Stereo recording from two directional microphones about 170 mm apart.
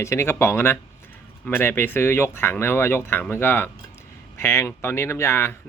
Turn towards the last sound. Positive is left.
turn(degrees=15)  # may be behind; listen again after turning